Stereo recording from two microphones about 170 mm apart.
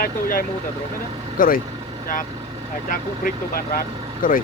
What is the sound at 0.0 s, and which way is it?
Speech, 60° left (ahead or behind).